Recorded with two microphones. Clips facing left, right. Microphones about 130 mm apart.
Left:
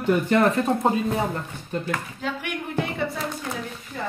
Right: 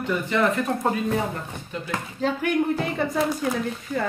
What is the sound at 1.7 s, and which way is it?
Speech, 45° left (ahead or behind).